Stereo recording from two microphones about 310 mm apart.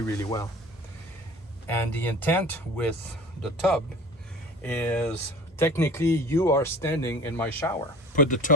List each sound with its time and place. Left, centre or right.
0.1 s speech: centre
1.6 s speech: centre
8.1 s speech: left